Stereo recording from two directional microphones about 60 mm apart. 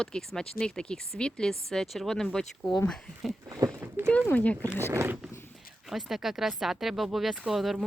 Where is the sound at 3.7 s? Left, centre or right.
Right.